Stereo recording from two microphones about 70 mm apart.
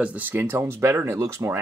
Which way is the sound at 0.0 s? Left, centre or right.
Right.